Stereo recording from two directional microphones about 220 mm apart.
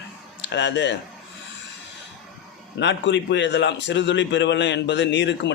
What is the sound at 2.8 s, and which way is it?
A man's voice, 55° left (ahead or behind).